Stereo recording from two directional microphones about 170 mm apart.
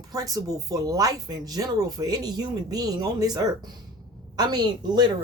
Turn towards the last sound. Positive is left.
turn(degrees=-25)  # may be behind; listen again after turning